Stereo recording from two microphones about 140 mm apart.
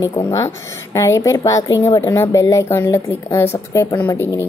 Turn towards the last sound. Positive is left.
turn(degrees=15)  # may be behind; listen again after turning